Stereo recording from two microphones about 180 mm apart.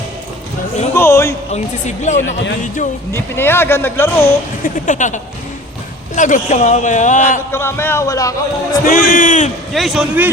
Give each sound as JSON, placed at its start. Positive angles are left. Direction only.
{"t": 0.9, "sound": "a sound", "side_deg": 15}
{"t": 1.5, "sound": "speech", "side_deg": 40}
{"t": 2.1, "sound": "speech", "side_deg": 90}
{"t": 3.1, "sound": "speech", "side_deg": 15}
{"t": 4.6, "sound": "speech", "side_deg": 45}
{"t": 7.5, "sound": "speech", "side_deg": 15}
{"t": 8.7, "sound": "speech", "side_deg": 45}
{"t": 9.7, "sound": "a man's voice", "side_deg": 0}